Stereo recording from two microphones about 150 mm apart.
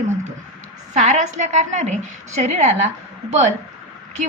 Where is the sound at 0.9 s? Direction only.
55° right (ahead or behind).